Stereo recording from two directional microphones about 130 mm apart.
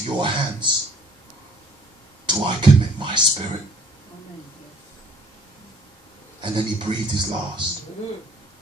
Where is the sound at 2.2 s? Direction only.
40° right (ahead or behind).